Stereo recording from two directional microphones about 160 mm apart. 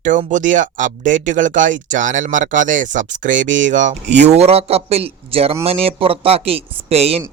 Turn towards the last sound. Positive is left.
turn(degrees=-40)  # may be behind; listen again after turning